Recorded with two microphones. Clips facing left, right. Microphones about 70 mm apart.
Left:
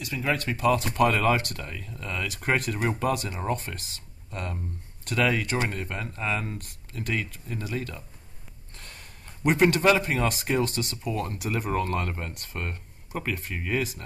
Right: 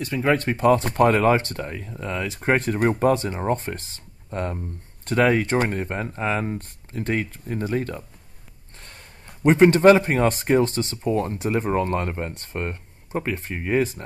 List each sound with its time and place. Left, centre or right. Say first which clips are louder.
0.0 s speech: right 7 dB; right
9.4 s speech: right 7 dB; right